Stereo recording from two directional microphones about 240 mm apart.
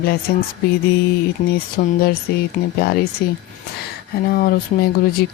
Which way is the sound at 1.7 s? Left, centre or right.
Left.